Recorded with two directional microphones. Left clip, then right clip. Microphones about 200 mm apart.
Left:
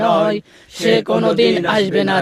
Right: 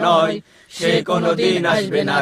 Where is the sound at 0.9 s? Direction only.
55° left (ahead or behind).